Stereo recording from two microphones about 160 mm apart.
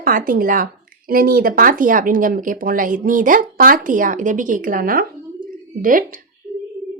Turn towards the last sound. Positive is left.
turn(degrees=-55)  # may be behind; listen again after turning